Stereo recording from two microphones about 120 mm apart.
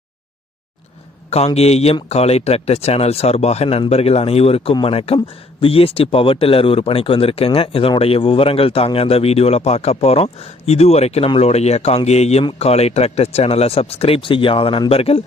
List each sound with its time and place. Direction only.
1.5 s speech: 60° left (ahead or behind)